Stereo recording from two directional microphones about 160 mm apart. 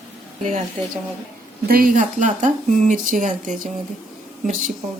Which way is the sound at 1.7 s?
60° right (ahead or behind).